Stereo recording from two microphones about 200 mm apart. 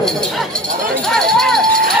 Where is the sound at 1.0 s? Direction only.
Centre (ahead or behind).